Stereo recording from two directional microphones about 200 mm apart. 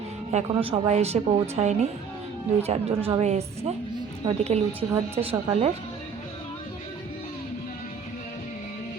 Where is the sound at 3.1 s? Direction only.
30° right (ahead or behind).